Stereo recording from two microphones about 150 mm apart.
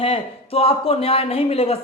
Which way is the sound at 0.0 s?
40° left (ahead or behind).